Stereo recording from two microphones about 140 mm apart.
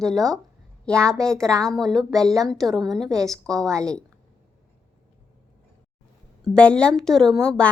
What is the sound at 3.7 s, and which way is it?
Speech, 20° right (ahead or behind).